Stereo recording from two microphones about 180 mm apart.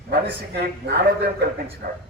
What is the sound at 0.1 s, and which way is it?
A man's voice, 60° right (ahead or behind).